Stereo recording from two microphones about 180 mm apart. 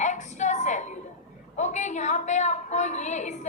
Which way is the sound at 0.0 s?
40° left (ahead or behind).